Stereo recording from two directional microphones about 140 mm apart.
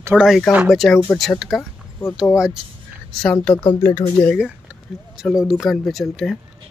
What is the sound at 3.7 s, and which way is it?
Speech, 20° left (ahead or behind).